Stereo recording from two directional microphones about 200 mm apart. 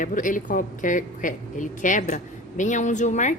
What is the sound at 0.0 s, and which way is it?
A woman's voice, 40° left (ahead or behind).